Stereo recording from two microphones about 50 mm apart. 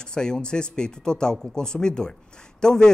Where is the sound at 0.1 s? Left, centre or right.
Centre.